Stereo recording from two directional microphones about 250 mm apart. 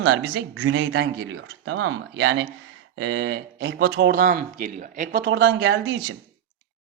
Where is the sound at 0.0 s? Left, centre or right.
Right.